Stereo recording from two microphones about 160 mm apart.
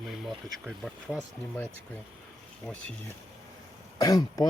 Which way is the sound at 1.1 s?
15° left (ahead or behind).